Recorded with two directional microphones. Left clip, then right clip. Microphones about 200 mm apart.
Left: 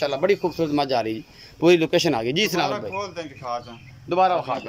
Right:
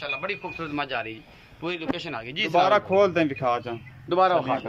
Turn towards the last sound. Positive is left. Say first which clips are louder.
# left 1 dB
turn(degrees=5)  # may be behind; listen again after turning